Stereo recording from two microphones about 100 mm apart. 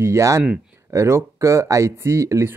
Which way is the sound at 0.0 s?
30° right (ahead or behind).